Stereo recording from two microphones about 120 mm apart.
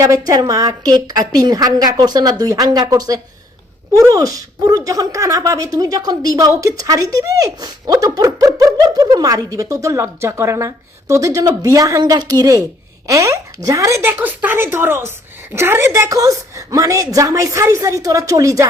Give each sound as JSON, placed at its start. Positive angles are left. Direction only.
{"t": 0.0, "sound": "a woman's voice", "side_deg": -30}